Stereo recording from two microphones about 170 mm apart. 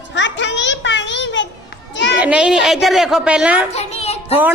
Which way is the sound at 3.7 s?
40° left (ahead or behind).